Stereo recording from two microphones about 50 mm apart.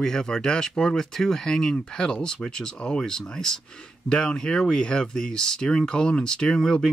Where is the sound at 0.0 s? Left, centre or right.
Centre.